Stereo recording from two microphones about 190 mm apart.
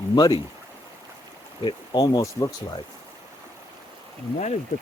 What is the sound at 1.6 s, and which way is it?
Speech, 25° left (ahead or behind).